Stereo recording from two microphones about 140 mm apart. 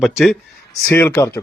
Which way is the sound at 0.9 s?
15° left (ahead or behind).